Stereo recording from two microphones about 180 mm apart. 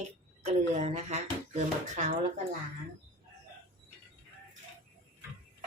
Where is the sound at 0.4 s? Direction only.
35° right (ahead or behind).